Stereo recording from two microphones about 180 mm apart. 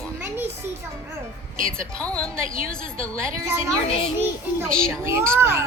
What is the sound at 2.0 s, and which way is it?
A woman's voice, 5° left (ahead or behind).